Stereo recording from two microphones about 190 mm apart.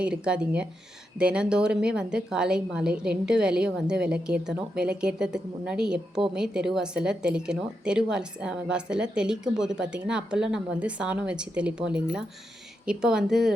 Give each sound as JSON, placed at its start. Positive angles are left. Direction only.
{"t": 0.0, "sound": "a woman's voice", "side_deg": -5}